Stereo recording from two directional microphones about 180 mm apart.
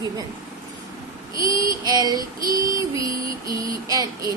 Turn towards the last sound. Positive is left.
turn(degrees=-20)  # may be behind; listen again after turning